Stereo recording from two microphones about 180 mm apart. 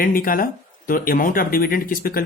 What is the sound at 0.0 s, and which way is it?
Speech, 50° left (ahead or behind).